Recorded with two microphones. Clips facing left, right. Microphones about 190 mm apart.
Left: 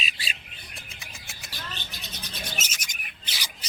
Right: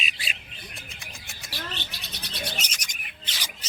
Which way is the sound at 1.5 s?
65° right (ahead or behind).